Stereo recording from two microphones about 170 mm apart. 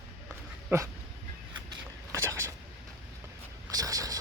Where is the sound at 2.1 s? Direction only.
15° right (ahead or behind).